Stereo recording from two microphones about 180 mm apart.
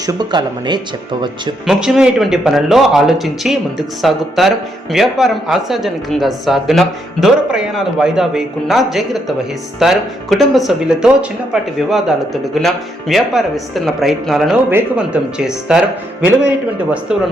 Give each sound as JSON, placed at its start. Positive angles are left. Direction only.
{"t": 0.0, "sound": "speech", "side_deg": -20}
{"t": 1.6, "sound": "speech", "side_deg": -5}